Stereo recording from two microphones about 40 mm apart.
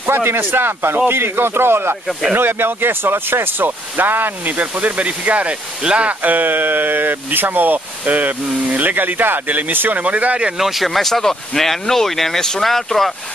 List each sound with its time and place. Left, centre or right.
0.0 s speech: right
2.3 s speech: right
9.9 s speech: right
10.6 s speech: centre